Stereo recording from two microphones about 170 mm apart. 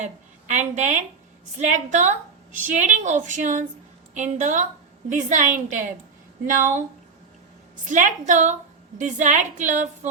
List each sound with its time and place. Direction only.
0.0 s a woman's voice: 45° right (ahead or behind)
7.9 s a woman's voice: 45° right (ahead or behind)